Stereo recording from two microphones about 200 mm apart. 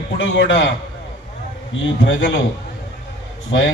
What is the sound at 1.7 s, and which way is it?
Speech, 70° left (ahead or behind).